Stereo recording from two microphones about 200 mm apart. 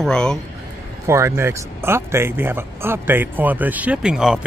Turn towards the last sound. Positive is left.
turn(degrees=-5)  # may be behind; listen again after turning